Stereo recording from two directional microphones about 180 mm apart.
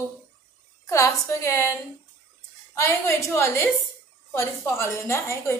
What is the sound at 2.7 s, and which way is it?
A woman's voice, 15° left (ahead or behind).